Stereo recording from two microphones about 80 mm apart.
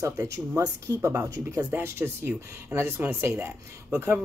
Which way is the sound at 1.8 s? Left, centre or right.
Right.